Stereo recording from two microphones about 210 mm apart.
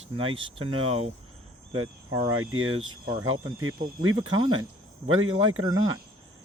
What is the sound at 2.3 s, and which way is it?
Speech, 80° right.